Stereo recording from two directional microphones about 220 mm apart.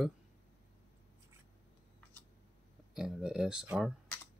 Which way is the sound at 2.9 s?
Centre (ahead or behind).